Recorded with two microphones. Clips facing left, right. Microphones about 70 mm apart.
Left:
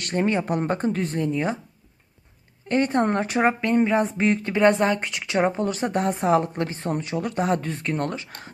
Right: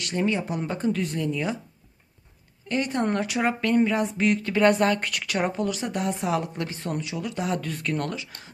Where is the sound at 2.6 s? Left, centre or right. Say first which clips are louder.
Left 4 dB; left.